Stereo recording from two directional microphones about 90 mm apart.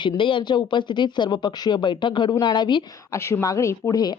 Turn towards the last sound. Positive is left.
turn(degrees=35)  # may be behind; listen again after turning